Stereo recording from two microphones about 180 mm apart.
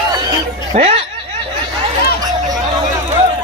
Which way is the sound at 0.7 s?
40° right (ahead or behind).